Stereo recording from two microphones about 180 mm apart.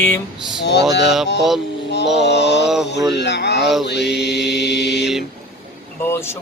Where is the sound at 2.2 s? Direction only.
70° left (ahead or behind).